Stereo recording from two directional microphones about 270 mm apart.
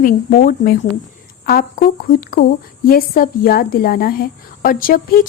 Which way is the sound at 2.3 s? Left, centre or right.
Left.